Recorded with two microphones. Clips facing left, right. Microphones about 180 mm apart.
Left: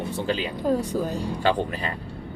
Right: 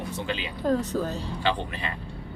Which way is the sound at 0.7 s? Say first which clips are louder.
Left 1 dB; 10° left (ahead or behind).